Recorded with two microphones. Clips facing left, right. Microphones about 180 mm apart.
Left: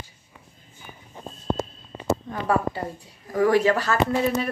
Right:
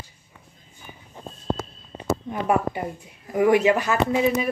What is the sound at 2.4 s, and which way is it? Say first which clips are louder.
A woman's voice: right 1 dB; 15° right (ahead or behind).